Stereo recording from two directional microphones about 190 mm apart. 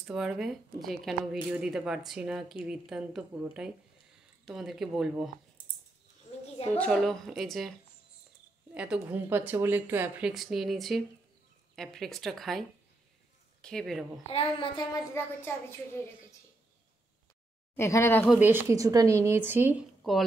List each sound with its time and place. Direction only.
0.0 s a woman's voice: 5° right (ahead or behind)
6.7 s a woman's voice: 5° left (ahead or behind)
8.7 s a woman's voice: 5° right (ahead or behind)
14.2 s a woman's voice: 30° left (ahead or behind)
15.2 s speech: 15° left (ahead or behind)
17.7 s speech: 15° left (ahead or behind)
18.3 s speech: 10° right (ahead or behind)
20.0 s speech: centre (ahead or behind)